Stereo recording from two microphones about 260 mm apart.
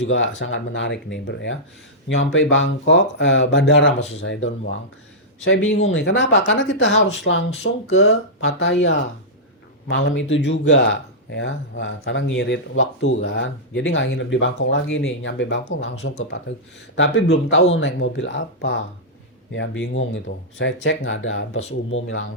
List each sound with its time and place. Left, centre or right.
0.0 s speech: left